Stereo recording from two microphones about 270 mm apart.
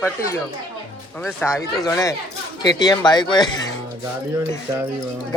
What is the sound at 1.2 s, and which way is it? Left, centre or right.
Speech, centre.